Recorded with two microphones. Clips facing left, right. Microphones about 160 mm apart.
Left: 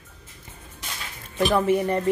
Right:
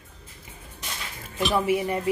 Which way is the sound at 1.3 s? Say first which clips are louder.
Left 3 dB; 5° right (ahead or behind).